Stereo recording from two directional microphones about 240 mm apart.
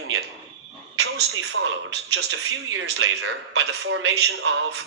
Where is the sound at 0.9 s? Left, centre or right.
Right.